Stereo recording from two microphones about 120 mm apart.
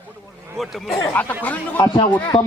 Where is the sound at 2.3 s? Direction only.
50° left (ahead or behind).